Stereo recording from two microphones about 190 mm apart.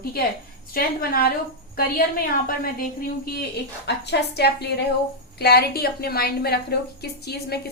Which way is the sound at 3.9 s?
60° left (ahead or behind).